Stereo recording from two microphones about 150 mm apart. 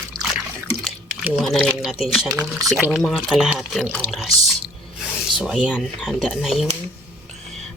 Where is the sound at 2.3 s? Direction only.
25° right (ahead or behind).